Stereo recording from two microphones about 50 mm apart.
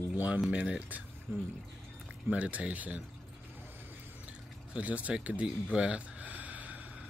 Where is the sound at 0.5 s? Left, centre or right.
Right.